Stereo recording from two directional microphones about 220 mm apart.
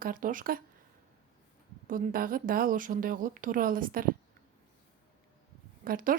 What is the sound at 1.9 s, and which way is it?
A woman's voice, 40° right (ahead or behind).